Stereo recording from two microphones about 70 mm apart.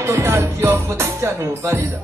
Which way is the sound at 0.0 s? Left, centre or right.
Right.